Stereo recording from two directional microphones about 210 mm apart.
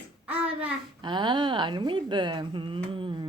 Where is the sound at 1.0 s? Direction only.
20° right (ahead or behind).